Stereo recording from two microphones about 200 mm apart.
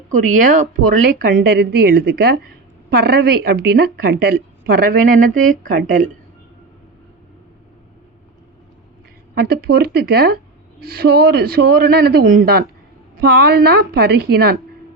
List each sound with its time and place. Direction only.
0.1 s a woman's voice: 40° right (ahead or behind)
9.3 s a woman's voice: 50° right (ahead or behind)